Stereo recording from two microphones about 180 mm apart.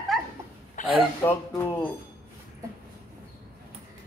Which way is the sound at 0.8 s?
45° left (ahead or behind).